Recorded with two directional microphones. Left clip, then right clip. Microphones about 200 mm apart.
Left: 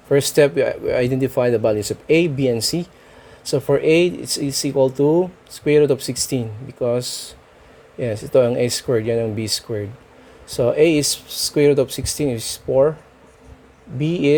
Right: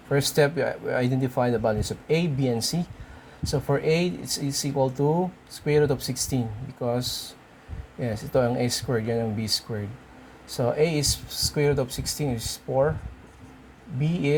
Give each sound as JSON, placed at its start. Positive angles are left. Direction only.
{"t": 0.1, "sound": "speech", "side_deg": 50}
{"t": 10.6, "sound": "speech", "side_deg": 50}
{"t": 14.0, "sound": "speech", "side_deg": 50}